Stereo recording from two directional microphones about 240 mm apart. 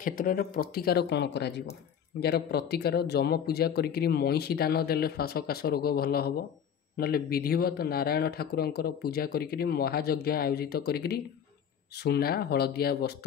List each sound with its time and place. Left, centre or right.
0.0 s speech: left